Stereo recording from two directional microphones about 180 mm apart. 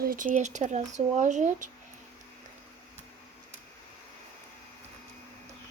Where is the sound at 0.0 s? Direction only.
50° right (ahead or behind).